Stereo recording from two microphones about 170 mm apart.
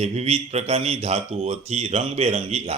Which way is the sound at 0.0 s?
40° right (ahead or behind).